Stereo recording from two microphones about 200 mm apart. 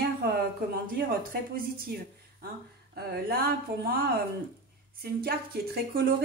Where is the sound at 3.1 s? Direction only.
50° right (ahead or behind).